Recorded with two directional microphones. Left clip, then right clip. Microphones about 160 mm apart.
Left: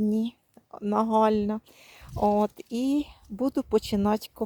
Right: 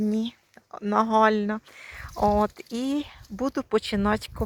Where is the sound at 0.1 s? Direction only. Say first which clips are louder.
Even; 25° left (ahead or behind).